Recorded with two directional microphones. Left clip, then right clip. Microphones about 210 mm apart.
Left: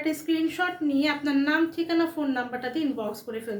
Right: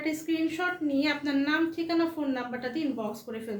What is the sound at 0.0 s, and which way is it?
A woman's voice, 15° left (ahead or behind).